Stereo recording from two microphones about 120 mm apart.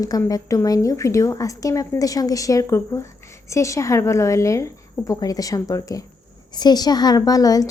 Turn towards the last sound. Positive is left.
turn(degrees=30)  # may be behind; listen again after turning